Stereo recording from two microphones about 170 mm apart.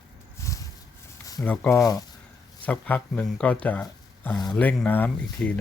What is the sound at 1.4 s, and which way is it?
Speech, 10° left (ahead or behind).